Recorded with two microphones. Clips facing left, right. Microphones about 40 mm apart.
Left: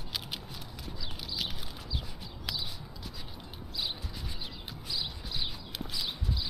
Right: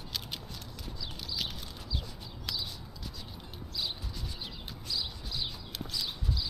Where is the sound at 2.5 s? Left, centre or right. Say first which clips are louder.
Left 1 dB; centre.